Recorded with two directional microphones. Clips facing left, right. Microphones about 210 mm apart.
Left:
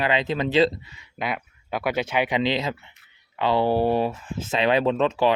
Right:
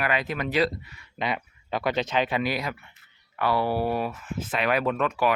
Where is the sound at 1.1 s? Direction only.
5° left (ahead or behind).